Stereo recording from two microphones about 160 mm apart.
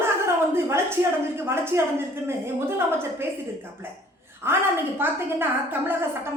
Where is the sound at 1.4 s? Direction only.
15° right (ahead or behind).